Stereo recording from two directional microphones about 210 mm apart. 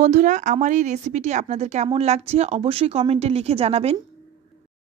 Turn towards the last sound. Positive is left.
turn(degrees=-30)  # may be behind; listen again after turning